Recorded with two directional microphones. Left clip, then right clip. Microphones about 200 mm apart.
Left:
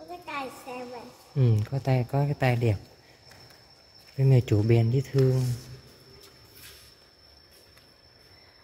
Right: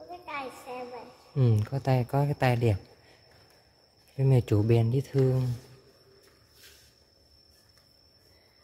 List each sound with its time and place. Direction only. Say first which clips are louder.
0.2 s a sound: left 2 dB; 50° left (ahead or behind)
1.3 s speech: even; 15° right (ahead or behind)
4.2 s speech: left 1 dB; 10° right (ahead or behind)